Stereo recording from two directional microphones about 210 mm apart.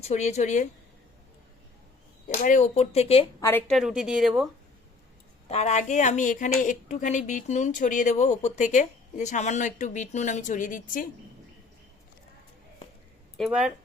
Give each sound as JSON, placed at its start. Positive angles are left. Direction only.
{"t": 0.0, "sound": "a woman's voice", "side_deg": 30}
{"t": 2.2, "sound": "a woman's voice", "side_deg": 40}
{"t": 3.7, "sound": "speech", "side_deg": 0}
{"t": 5.5, "sound": "a woman's voice", "side_deg": 30}
{"t": 13.3, "sound": "speech", "side_deg": 0}